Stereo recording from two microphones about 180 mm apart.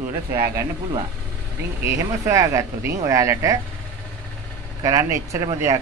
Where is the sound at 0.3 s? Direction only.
15° right (ahead or behind).